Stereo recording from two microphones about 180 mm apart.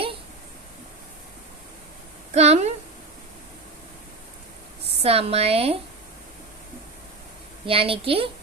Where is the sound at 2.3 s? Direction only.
35° right (ahead or behind).